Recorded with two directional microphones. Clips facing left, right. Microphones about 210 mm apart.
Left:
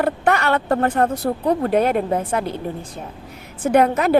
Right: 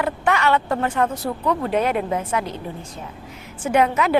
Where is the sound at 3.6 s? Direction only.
50° left (ahead or behind).